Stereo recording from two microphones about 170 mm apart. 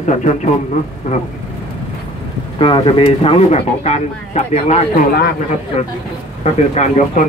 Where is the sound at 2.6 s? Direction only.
30° left (ahead or behind).